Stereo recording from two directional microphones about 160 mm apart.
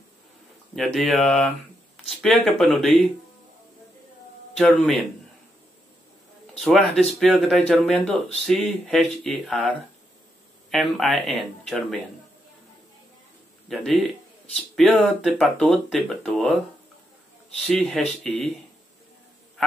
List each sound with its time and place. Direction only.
0.7 s speech: centre (ahead or behind)
4.6 s speech: centre (ahead or behind)
6.6 s speech: centre (ahead or behind)
13.7 s speech: centre (ahead or behind)
17.6 s speech: centre (ahead or behind)